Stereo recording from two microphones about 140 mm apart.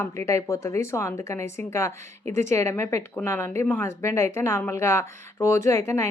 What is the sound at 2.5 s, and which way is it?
Speech, 20° left (ahead or behind).